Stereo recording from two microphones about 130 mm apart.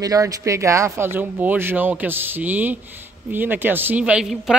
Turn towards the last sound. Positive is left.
turn(degrees=-5)  # may be behind; listen again after turning